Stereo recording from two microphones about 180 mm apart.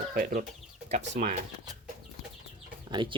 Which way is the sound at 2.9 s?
25° right (ahead or behind).